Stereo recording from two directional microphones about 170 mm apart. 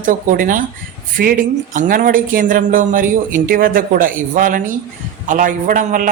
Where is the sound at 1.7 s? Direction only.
50° right (ahead or behind).